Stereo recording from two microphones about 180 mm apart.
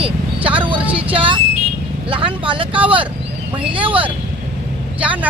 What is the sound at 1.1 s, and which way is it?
Speech, 30° right (ahead or behind).